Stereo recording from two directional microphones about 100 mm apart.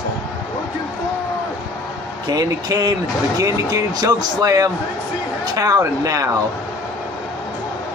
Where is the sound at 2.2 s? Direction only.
40° right (ahead or behind).